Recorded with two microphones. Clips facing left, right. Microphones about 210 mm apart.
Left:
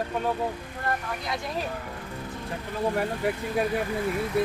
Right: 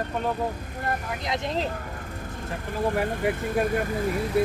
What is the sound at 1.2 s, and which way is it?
Speech, 20° right (ahead or behind).